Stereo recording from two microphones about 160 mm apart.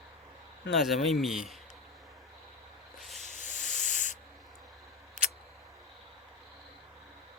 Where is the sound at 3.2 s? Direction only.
50° left (ahead or behind).